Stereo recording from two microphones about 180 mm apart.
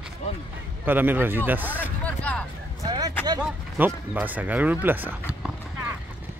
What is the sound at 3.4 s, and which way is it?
Speech, 10° right (ahead or behind).